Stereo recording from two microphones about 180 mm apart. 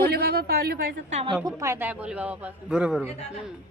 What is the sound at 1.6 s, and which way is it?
A woman's voice, 15° right (ahead or behind).